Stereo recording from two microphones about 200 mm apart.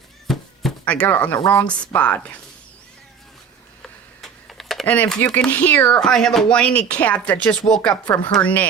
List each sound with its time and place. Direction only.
0.3 s a sound: 5° left (ahead or behind)
1.5 s speech: 5° left (ahead or behind)
4.2 s speech: centre (ahead or behind)